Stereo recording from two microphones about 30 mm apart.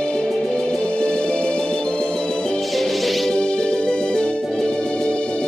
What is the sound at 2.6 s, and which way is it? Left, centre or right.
Music, centre.